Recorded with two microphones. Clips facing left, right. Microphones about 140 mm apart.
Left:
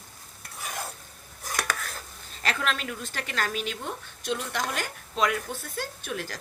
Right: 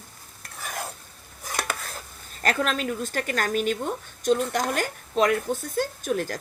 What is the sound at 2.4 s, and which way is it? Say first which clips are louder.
A woman's voice: right 5 dB; 45° right (ahead or behind).